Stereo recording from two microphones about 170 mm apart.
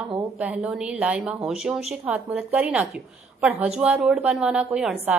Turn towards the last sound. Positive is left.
turn(degrees=-5)  # may be behind; listen again after turning